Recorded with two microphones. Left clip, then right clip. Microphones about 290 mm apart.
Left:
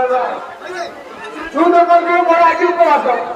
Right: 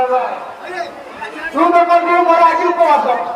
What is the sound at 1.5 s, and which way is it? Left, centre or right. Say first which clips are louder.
A man's voice: left 1 dB; right.